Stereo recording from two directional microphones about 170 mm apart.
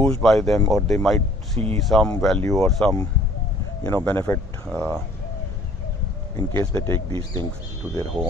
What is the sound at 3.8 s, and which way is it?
Speech, 10° left (ahead or behind).